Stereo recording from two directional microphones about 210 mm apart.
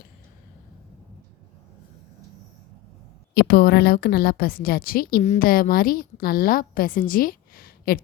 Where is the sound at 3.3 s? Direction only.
50° left (ahead or behind).